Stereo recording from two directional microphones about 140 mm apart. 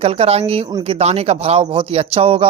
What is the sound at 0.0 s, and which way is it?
A man's voice, 45° right (ahead or behind).